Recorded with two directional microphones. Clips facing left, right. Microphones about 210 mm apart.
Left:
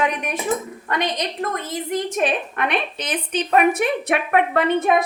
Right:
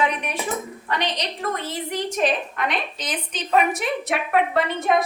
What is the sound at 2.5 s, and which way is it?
A woman's voice, 60° left (ahead or behind).